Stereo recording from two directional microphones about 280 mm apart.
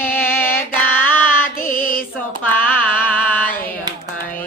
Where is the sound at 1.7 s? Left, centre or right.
Left.